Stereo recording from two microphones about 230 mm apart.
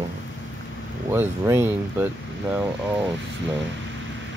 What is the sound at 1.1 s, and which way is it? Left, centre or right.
Speech, centre.